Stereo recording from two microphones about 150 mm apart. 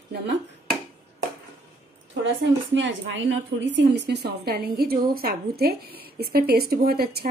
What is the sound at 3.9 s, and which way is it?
A woman's voice, 90° right.